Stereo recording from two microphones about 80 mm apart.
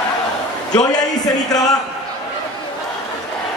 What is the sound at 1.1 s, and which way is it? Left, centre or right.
Music, left.